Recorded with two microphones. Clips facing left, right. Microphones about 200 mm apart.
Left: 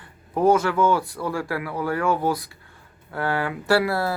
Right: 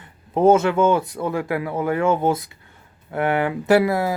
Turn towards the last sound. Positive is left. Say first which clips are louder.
# right 4 dB
turn(degrees=-20)  # may be behind; listen again after turning